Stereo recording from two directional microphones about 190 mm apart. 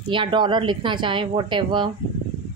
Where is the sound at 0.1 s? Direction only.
25° right (ahead or behind).